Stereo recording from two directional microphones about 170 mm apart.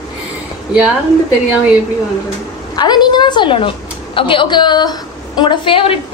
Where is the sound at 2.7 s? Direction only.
25° left (ahead or behind).